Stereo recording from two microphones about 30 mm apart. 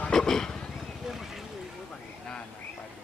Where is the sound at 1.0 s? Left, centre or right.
Centre.